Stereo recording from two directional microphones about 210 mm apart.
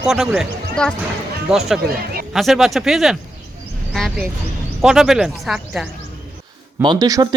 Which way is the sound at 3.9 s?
Centre (ahead or behind).